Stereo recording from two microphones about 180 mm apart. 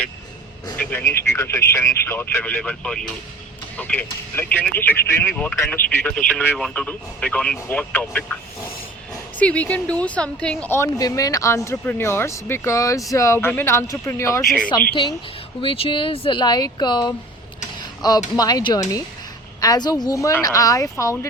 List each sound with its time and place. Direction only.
0.8 s speech: 10° left (ahead or behind)
5.3 s speech: 5° left (ahead or behind)
9.4 s speech: 10° left (ahead or behind)
15.6 s speech: 30° left (ahead or behind)
17.6 s a sound: 20° left (ahead or behind)
18.3 s speech: 20° left (ahead or behind)